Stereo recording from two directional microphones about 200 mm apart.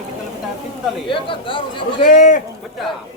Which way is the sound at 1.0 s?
25° left (ahead or behind).